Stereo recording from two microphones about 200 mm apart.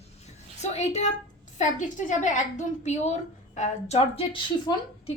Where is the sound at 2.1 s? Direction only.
35° left (ahead or behind).